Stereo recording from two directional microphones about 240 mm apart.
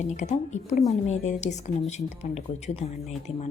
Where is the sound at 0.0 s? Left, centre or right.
Left.